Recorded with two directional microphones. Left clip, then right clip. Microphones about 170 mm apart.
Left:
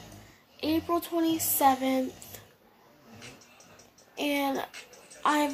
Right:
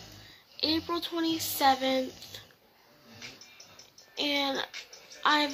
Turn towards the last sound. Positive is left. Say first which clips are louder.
# even
turn(degrees=10)  # may be behind; listen again after turning